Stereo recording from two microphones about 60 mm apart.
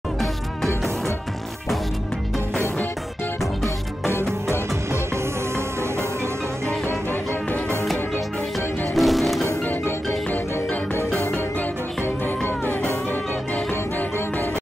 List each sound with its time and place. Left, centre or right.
8.9 s music: centre
9.7 s music: left
12.4 s music: left